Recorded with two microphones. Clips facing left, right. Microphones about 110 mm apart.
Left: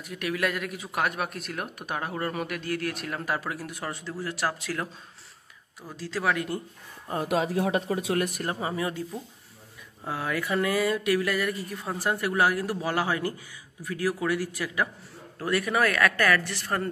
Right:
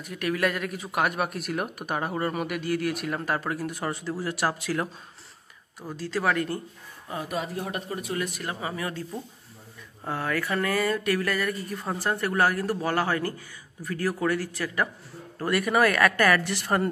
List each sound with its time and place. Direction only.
0.0 s speech: centre (ahead or behind)
5.9 s speech: centre (ahead or behind)
7.2 s speech: 90° left
8.3 s speech: 35° left (ahead or behind); by 9.0 s 20° left (ahead or behind)
10.0 s a man's voice: 5° left (ahead or behind)
15.3 s a woman's voice: centre (ahead or behind)